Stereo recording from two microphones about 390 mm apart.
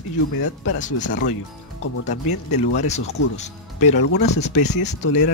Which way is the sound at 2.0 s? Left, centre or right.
Centre.